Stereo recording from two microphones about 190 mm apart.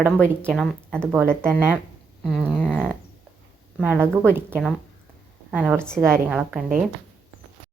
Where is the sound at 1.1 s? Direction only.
10° right (ahead or behind).